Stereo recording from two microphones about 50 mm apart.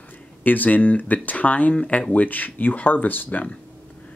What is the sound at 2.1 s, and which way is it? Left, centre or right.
Speech, left.